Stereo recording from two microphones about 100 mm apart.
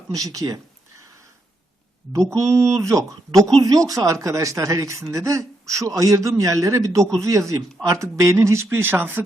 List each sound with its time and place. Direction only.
0.1 s a woman's voice: 35° right (ahead or behind)
2.3 s a woman's voice: 30° right (ahead or behind)